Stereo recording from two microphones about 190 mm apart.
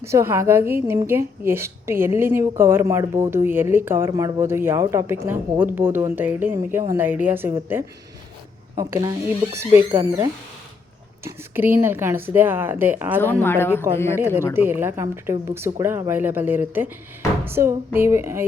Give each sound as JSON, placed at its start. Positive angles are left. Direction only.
{"t": 0.0, "sound": "a woman's voice", "side_deg": -15}
{"t": 11.2, "sound": "a woman's voice", "side_deg": -10}
{"t": 13.1, "sound": "a woman's voice", "side_deg": 10}
{"t": 14.5, "sound": "a woman's voice", "side_deg": -10}